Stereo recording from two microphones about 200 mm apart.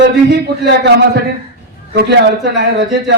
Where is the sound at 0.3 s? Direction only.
55° right (ahead or behind).